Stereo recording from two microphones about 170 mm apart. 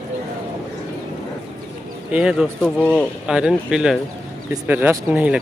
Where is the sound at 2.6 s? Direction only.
5° left (ahead or behind).